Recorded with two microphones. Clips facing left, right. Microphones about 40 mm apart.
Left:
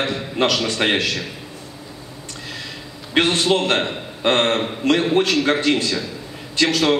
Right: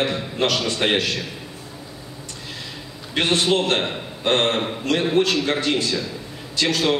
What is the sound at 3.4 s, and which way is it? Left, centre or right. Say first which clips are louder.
A man's voice: left 2 dB; left.